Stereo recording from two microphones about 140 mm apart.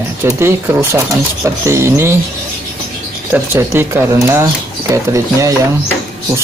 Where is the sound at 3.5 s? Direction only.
20° right (ahead or behind).